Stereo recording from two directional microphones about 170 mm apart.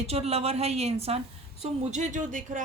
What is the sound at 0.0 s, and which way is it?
A woman's voice, 35° right (ahead or behind).